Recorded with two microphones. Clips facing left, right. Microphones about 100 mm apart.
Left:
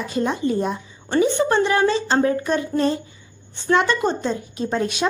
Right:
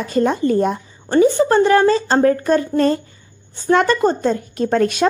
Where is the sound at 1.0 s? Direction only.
35° right (ahead or behind).